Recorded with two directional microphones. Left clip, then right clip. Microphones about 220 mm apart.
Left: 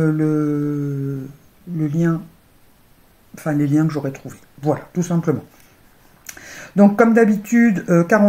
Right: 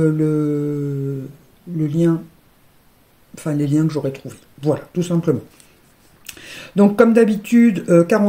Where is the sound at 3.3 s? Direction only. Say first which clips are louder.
Left 1 dB; 70° right (ahead or behind).